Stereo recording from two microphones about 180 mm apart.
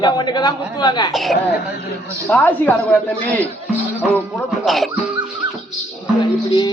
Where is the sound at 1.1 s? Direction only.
Centre (ahead or behind).